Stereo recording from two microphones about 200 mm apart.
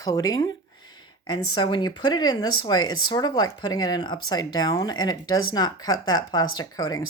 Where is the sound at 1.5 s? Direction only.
20° left (ahead or behind).